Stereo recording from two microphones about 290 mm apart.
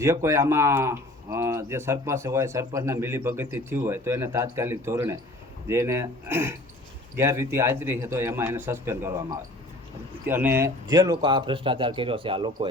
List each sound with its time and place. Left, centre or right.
0.0 s speech: centre